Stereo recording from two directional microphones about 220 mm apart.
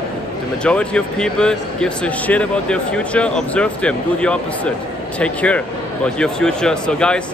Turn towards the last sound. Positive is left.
turn(degrees=5)  # may be behind; listen again after turning